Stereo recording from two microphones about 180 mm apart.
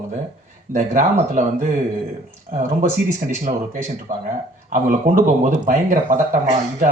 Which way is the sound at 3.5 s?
35° right (ahead or behind).